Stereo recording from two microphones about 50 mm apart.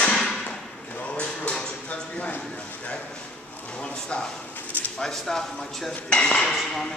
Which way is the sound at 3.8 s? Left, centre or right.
Left.